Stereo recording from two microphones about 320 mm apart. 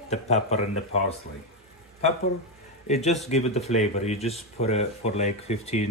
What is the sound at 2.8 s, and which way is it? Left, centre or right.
Speech, left.